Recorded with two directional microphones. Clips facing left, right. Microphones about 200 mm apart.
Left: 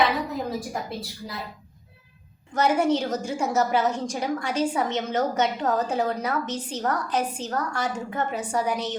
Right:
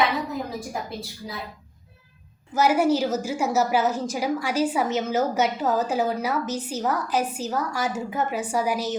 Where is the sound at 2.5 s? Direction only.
5° right (ahead or behind).